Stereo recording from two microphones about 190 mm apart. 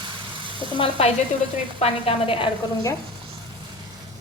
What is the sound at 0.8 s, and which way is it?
A woman's voice, 30° left (ahead or behind).